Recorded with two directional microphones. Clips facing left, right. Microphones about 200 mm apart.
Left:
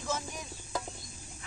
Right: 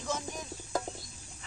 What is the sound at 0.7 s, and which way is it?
Bird, 50° right (ahead or behind).